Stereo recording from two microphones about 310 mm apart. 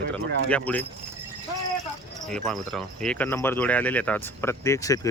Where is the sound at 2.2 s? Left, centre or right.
Centre.